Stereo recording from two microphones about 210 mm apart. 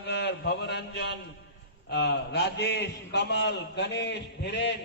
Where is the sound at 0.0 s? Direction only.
55° left (ahead or behind).